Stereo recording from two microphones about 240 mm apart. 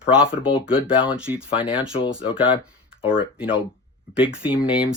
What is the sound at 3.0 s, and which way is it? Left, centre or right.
Speech, centre.